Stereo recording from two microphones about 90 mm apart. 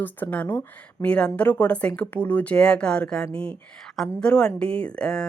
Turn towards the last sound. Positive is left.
turn(degrees=10)  # may be behind; listen again after turning